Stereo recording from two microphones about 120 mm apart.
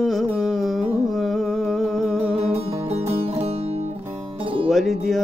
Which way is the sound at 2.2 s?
60° right (ahead or behind).